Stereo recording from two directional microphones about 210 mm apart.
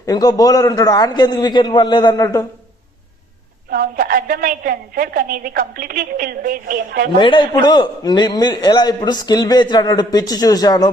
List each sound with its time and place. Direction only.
0.0 s a man's voice: 20° left (ahead or behind)
3.7 s a woman's voice: 45° right (ahead or behind)
7.2 s a man's voice: 25° left (ahead or behind)